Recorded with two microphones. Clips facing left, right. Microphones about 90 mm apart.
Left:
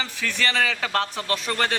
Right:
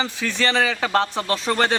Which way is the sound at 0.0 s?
25° right (ahead or behind).